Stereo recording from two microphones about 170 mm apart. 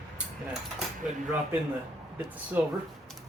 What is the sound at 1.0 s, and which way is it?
Speech, 5° right (ahead or behind).